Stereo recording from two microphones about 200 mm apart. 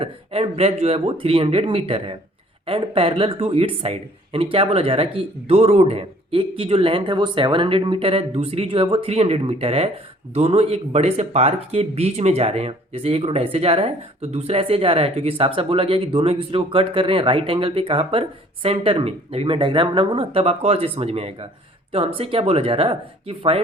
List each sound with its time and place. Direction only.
0.0 s speech: 30° right (ahead or behind)